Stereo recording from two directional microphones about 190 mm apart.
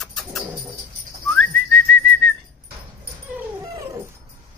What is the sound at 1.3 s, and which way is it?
Whistling, 10° left (ahead or behind).